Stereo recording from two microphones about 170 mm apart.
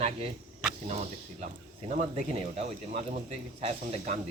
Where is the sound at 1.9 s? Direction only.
40° right (ahead or behind).